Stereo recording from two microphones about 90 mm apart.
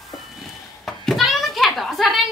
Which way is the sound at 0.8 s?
Centre (ahead or behind).